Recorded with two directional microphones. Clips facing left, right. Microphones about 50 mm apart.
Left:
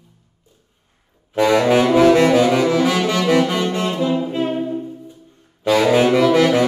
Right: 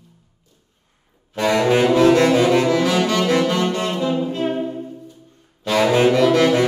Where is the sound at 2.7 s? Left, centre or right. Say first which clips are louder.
Left 1 dB; left.